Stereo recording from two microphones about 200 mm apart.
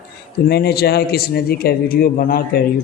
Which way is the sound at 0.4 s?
50° left (ahead or behind).